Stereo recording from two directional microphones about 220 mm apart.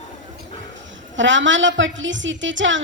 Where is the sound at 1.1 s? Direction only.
55° right (ahead or behind).